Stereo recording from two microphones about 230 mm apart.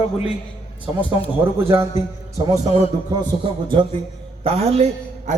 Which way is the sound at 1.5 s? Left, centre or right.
Centre.